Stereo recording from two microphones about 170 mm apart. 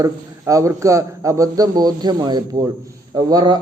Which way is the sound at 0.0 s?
20° right (ahead or behind).